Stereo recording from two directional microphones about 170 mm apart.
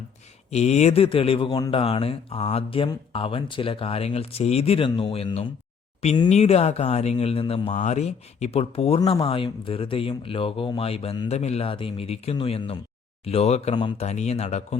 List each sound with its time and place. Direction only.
0.5 s speech: 40° left (ahead or behind)
14.1 s speech: 40° left (ahead or behind)